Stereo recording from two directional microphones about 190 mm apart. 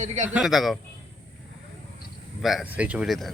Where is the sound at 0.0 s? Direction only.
40° right (ahead or behind).